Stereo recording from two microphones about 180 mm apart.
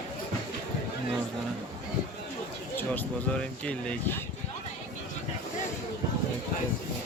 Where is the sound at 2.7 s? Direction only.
10° left (ahead or behind).